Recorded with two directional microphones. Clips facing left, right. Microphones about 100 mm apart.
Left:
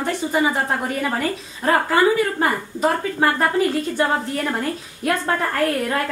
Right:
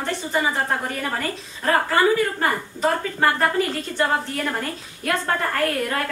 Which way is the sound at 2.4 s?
10° left (ahead or behind).